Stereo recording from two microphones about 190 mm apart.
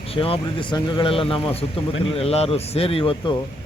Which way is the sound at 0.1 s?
30° left (ahead or behind).